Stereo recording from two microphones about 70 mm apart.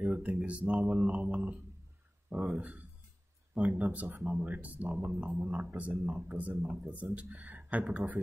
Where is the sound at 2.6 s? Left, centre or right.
Centre.